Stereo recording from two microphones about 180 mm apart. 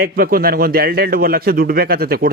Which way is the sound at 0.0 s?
55° right (ahead or behind).